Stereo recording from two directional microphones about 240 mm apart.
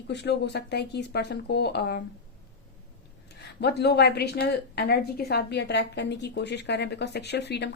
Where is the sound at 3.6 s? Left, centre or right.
Left.